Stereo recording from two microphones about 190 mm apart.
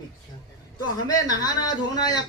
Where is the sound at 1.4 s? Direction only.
20° left (ahead or behind).